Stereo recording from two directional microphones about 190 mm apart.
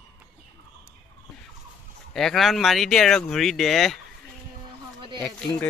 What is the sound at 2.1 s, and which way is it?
Speech, centre (ahead or behind).